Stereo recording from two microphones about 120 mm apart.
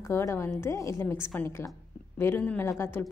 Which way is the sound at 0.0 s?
25° left (ahead or behind).